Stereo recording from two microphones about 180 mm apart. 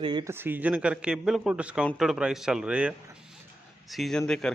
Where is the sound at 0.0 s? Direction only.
25° right (ahead or behind).